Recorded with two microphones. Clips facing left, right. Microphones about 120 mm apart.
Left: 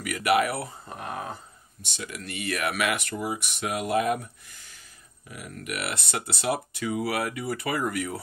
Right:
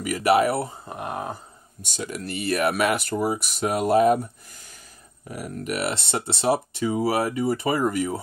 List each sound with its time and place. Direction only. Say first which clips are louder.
0.0 s speech: right 4 dB; 30° right (ahead or behind)
1.8 s speech: right 6 dB; 45° right (ahead or behind)
5.5 s speech: right 6 dB; 35° right (ahead or behind)